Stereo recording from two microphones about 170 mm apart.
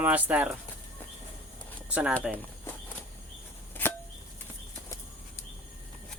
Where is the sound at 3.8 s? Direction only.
10° left (ahead or behind).